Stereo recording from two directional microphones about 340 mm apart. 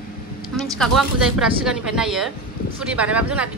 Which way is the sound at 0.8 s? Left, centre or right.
Centre.